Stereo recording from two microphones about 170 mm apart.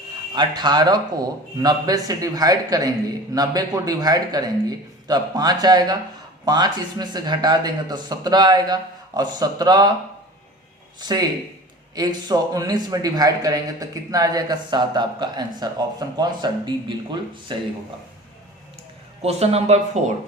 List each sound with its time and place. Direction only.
0.3 s a man's voice: 25° right (ahead or behind)
11.0 s a man's voice: 25° right (ahead or behind)
19.2 s speech: 40° right (ahead or behind)